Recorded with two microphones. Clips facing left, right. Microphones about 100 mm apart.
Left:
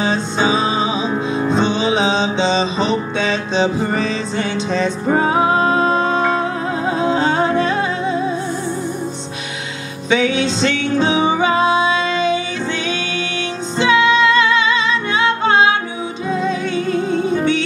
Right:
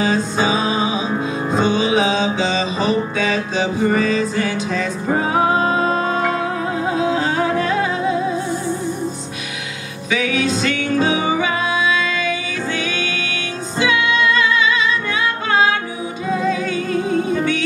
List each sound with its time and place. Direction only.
0.0 s music: 25° left (ahead or behind)
10.0 s music: 30° left (ahead or behind)
16.4 s music: 25° left (ahead or behind)